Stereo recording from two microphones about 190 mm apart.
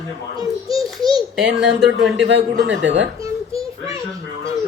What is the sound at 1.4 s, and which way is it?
Speech, centre (ahead or behind).